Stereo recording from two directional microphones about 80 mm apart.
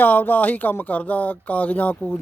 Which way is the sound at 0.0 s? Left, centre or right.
Left.